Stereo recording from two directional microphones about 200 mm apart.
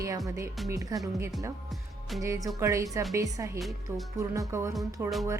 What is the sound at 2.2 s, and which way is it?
A woman's voice, 15° right (ahead or behind).